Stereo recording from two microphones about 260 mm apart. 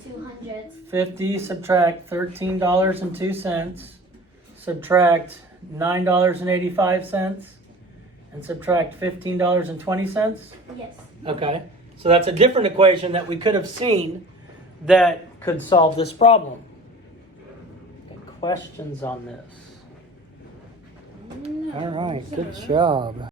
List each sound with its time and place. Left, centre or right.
0.9 s speech: centre
8.4 s speech: centre
11.2 s speech: centre
14.8 s a man's voice: centre
15.4 s speech: centre
18.4 s speech: centre
21.4 s speech: centre